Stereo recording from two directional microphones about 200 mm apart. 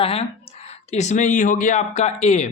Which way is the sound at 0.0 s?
30° left (ahead or behind).